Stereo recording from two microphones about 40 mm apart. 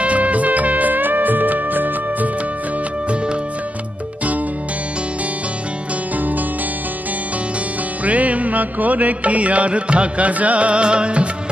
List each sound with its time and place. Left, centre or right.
0.0 s music: right
6.1 s music: right
8.0 s music: right